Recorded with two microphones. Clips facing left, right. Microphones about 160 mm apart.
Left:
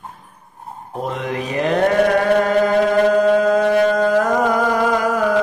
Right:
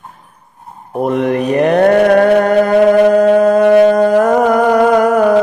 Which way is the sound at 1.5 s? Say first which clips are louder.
Right 7 dB; 55° right (ahead or behind).